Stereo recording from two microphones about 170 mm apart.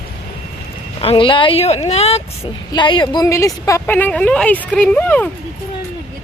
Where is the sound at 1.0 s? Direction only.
30° left (ahead or behind).